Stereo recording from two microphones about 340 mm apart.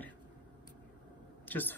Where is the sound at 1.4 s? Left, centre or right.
Centre.